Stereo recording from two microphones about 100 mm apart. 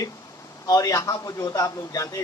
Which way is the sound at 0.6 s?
35° left (ahead or behind).